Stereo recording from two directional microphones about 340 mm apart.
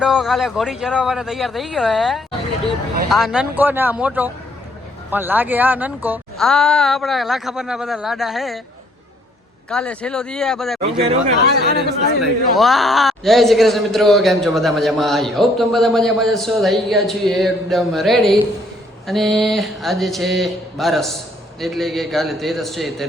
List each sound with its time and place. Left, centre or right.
0.0 s a man's voice: centre
9.6 s a man's voice: centre
11.5 s speech: right
12.2 s a man's voice: centre